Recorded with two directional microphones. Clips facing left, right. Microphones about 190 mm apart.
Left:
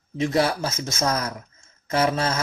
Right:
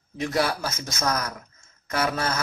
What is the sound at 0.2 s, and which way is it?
Speech, 25° left (ahead or behind).